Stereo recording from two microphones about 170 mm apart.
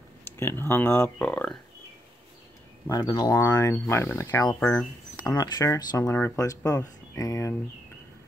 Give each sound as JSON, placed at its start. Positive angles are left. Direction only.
{"t": 0.2, "sound": "speech", "side_deg": 15}
{"t": 2.9, "sound": "speech", "side_deg": 25}
{"t": 4.6, "sound": "speech", "side_deg": 10}
{"t": 5.1, "sound": "speech", "side_deg": 20}